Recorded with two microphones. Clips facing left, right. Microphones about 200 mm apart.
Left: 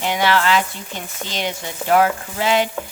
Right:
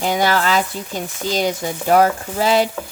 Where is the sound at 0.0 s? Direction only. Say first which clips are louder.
Right 1 dB; 40° right (ahead or behind).